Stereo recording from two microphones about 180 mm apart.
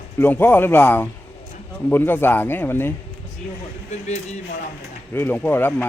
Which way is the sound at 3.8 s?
40° left (ahead or behind).